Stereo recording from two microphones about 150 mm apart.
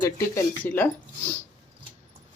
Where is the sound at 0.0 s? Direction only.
20° left (ahead or behind).